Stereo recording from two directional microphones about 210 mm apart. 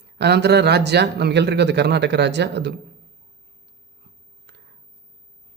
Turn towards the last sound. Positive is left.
turn(degrees=-55)  # may be behind; listen again after turning